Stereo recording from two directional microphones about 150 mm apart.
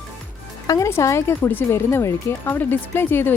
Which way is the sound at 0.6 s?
20° left (ahead or behind).